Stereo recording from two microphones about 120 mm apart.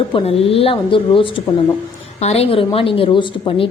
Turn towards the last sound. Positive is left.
turn(degrees=45)  # may be behind; listen again after turning